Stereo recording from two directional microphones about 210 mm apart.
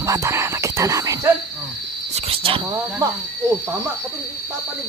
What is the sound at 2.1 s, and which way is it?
Speech, 25° right (ahead or behind).